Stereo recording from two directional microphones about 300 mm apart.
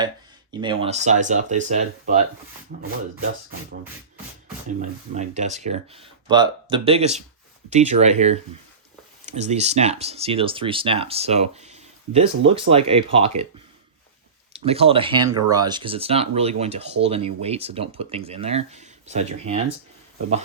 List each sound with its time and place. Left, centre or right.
0.5 s speech: centre
4.8 s speech: right
14.5 s speech: centre